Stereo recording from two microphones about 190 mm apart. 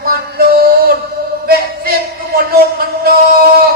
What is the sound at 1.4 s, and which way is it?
Music, 55° right (ahead or behind).